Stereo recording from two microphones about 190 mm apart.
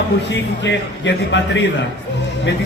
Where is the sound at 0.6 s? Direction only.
70° left (ahead or behind).